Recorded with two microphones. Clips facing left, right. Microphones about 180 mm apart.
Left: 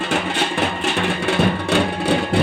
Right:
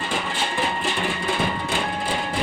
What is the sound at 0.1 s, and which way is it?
Music, 75° left (ahead or behind).